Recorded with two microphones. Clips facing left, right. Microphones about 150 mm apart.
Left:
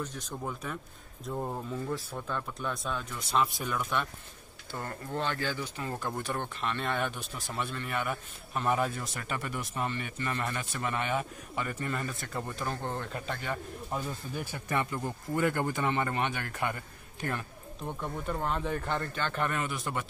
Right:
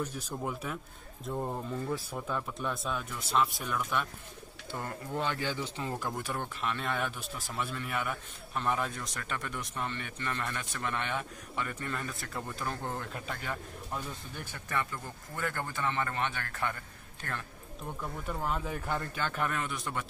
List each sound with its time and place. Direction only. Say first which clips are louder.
0.0 s speech: right 1 dB; 10° right (ahead or behind)
5.9 s speech: left 4 dB; 5° right (ahead or behind); by 16.7 s 15° left (ahead or behind)
18.2 s speech: left 2 dB; 5° right (ahead or behind)